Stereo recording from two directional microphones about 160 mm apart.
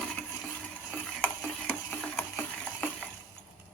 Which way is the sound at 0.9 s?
5° left (ahead or behind).